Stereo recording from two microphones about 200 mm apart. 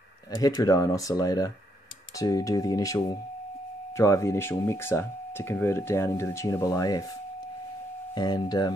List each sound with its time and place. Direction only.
0.3 s speech: 20° left (ahead or behind)
8.1 s speech: 20° left (ahead or behind)